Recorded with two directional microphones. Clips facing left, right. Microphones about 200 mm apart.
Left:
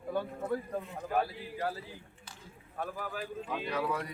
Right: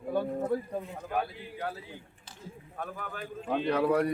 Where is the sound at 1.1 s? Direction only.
Centre (ahead or behind).